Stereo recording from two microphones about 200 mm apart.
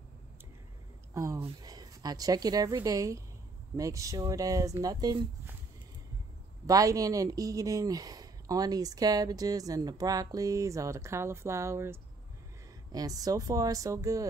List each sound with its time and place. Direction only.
1.1 s speech: 15° right (ahead or behind)
6.6 s speech: 15° right (ahead or behind)